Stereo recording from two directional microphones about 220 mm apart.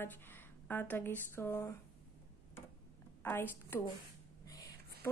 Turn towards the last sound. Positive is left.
turn(degrees=10)  # may be behind; listen again after turning